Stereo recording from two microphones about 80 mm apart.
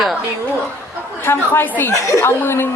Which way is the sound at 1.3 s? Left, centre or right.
Left.